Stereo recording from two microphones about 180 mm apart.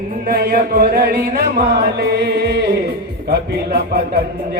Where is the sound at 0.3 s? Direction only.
55° right (ahead or behind).